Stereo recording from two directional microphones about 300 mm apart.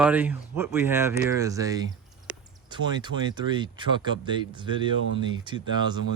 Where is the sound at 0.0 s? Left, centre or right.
Centre.